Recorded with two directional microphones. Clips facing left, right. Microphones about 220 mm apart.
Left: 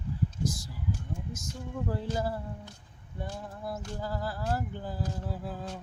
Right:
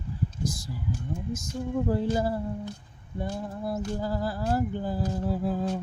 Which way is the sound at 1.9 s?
15° right (ahead or behind).